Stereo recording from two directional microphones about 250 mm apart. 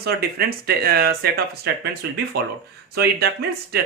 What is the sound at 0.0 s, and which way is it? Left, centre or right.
Speech, right.